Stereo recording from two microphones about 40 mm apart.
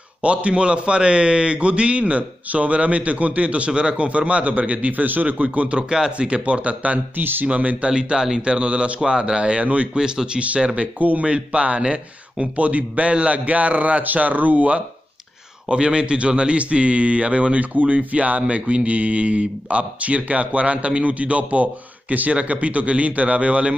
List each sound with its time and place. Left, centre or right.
0.2 s a man's voice: right
5.8 s a man's voice: centre; by 7.0 s right
7.2 s speech: right
7.4 s a man's voice: right
7.9 s speech: centre
8.4 s a man's voice: right
9.0 s a man's voice: centre
9.9 s a man's voice: centre
10.4 s a man's voice: right
11.2 s a man's voice: right
15.7 s a man's voice: right